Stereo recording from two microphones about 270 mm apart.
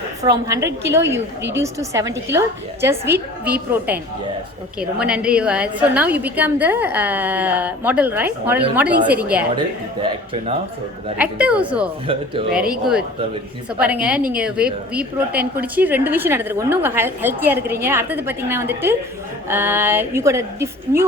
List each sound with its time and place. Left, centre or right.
0.3 s a woman's voice: centre
11.2 s a woman's voice: centre
12.0 s speech: centre
12.6 s speech: right
13.7 s a woman's voice: centre